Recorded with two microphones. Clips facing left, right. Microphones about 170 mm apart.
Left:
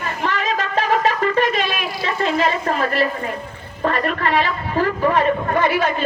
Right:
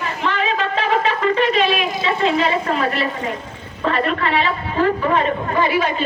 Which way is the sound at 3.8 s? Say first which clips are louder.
Right 1 dB; 50° left (ahead or behind).